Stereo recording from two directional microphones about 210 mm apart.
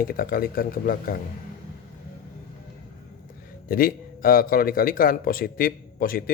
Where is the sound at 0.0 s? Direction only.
45° left (ahead or behind).